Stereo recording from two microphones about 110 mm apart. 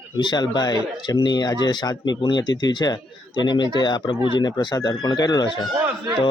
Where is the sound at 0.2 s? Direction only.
40° left (ahead or behind).